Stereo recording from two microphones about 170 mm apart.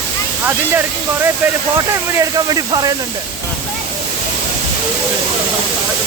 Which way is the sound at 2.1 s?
20° right (ahead or behind).